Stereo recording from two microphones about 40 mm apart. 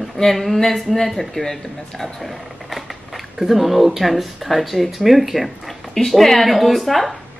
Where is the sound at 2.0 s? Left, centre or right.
Centre.